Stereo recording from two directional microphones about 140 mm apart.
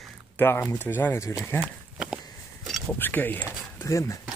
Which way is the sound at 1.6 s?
5° right (ahead or behind).